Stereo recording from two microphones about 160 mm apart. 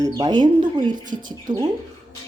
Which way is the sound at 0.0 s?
20° right (ahead or behind).